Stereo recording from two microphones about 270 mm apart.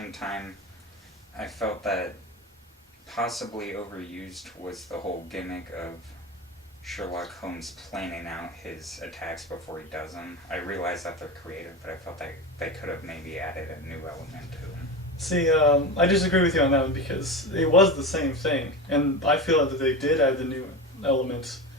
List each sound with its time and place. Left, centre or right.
0.0 s a man's voice: centre
3.1 s a man's voice: centre
6.8 s a man's voice: centre
15.2 s a man's voice: centre
21.1 s speech: left